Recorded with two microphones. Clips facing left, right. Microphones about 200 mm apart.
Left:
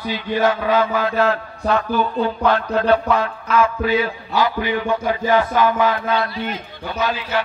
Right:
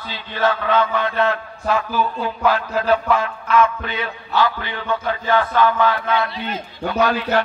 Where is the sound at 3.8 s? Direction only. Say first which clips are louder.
Left 8 dB; 5° left (ahead or behind).